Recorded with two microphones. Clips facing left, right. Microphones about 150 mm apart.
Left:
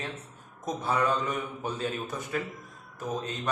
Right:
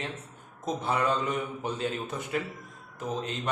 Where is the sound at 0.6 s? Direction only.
20° right (ahead or behind).